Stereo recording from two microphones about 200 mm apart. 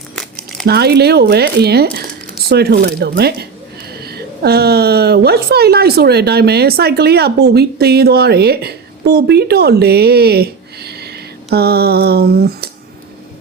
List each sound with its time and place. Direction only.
0.6 s a woman's voice: 55° right (ahead or behind)